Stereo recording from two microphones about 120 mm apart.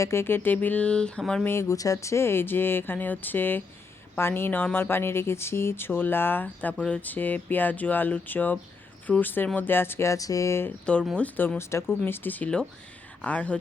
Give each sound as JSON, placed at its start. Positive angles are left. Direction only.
{"t": 0.0, "sound": "speech", "side_deg": 20}
{"t": 1.5, "sound": "speech", "side_deg": 25}
{"t": 10.9, "sound": "speech", "side_deg": 10}